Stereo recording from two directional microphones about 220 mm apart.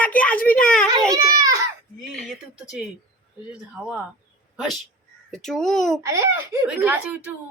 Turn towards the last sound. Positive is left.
turn(degrees=-5)  # may be behind; listen again after turning